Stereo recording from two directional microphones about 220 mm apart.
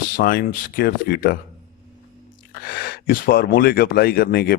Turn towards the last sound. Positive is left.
turn(degrees=45)  # may be behind; listen again after turning